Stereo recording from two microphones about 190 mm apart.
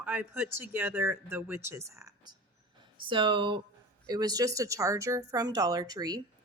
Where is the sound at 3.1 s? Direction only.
25° right (ahead or behind).